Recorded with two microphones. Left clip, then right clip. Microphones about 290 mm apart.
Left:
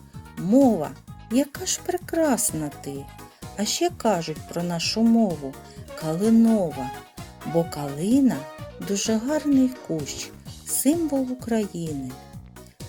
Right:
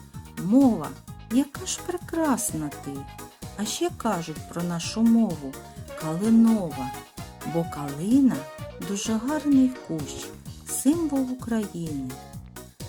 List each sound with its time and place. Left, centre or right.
0.3 s speech: centre